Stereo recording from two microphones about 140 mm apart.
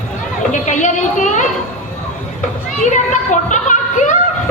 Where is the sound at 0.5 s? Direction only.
60° left (ahead or behind).